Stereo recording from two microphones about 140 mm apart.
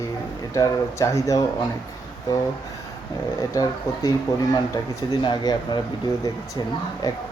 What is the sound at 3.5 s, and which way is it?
Speech, 25° left (ahead or behind).